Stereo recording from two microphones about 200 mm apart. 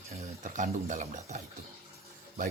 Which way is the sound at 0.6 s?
40° right (ahead or behind).